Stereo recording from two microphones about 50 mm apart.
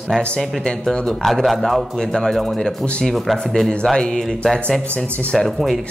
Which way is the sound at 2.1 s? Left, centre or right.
Centre.